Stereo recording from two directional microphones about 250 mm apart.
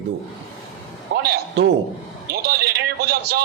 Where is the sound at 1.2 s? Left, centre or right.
Right.